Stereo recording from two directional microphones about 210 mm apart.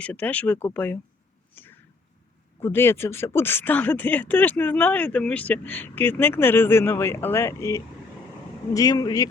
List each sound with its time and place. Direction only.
0.0 s speech: 5° left (ahead or behind)
1.5 s a sound: 10° left (ahead or behind)
2.6 s speech: 10° left (ahead or behind)